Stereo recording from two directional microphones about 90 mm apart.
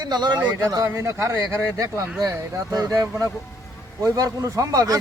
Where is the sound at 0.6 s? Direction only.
45° right (ahead or behind).